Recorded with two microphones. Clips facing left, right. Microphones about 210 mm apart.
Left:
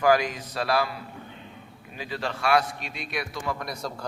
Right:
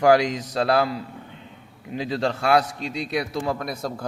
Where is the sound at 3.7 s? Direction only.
55° right (ahead or behind).